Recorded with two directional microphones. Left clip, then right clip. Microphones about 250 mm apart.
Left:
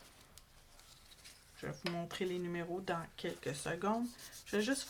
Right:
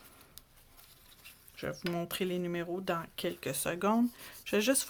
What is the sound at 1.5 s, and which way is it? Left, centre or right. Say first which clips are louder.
Speech: right 5 dB; right.